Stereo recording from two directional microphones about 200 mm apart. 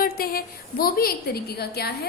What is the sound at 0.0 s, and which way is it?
A woman's voice, 45° left (ahead or behind).